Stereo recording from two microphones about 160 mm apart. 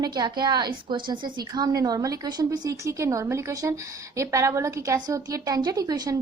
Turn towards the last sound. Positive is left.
turn(degrees=-25)  # may be behind; listen again after turning